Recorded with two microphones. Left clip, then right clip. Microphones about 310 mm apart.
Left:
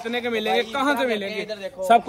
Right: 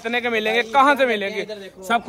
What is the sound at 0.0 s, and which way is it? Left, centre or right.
A man's voice, centre.